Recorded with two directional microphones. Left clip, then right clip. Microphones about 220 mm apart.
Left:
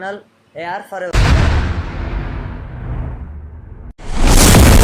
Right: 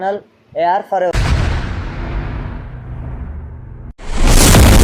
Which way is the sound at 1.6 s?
Centre (ahead or behind).